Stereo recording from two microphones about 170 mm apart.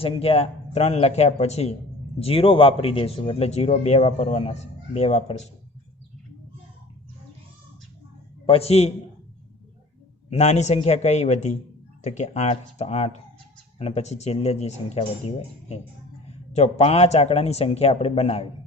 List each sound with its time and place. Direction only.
0.0 s speech: 35° left (ahead or behind)
8.4 s speech: 35° left (ahead or behind)
10.2 s speech: 40° left (ahead or behind)
16.5 s speech: 40° left (ahead or behind)